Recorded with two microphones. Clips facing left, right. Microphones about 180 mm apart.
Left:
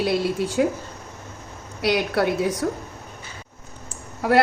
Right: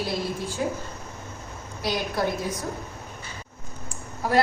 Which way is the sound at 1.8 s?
70° left (ahead or behind).